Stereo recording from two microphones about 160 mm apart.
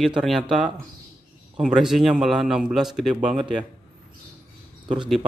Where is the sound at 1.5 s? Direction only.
5° right (ahead or behind).